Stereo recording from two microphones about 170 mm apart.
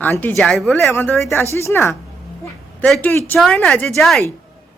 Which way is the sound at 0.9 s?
15° left (ahead or behind).